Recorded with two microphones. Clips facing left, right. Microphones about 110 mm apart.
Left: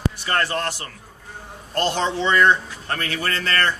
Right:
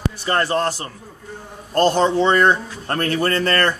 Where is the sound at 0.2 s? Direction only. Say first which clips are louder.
Right 7 dB; 30° right (ahead or behind).